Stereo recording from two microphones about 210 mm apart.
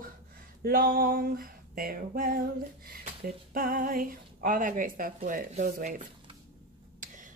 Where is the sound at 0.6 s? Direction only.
45° right (ahead or behind).